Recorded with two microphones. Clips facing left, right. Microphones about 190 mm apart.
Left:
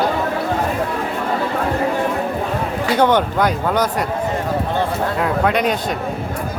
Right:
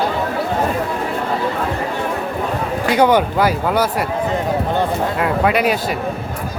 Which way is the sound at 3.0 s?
10° right (ahead or behind).